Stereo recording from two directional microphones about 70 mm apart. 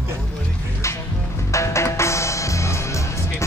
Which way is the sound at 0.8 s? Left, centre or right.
Left.